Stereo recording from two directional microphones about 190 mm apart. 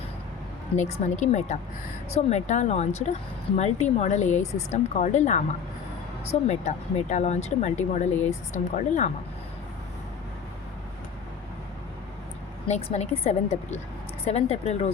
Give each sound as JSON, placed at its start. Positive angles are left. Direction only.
{"t": 0.8, "sound": "speech", "side_deg": 35}
{"t": 12.6, "sound": "speech", "side_deg": 35}